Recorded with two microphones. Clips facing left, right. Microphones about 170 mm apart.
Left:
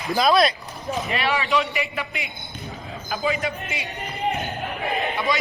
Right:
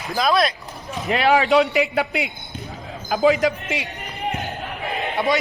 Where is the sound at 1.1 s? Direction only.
90° right.